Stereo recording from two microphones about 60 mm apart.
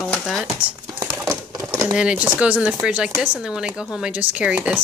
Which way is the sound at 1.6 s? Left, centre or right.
Right.